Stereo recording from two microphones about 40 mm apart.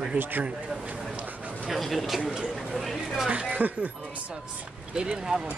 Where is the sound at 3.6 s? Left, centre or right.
Right.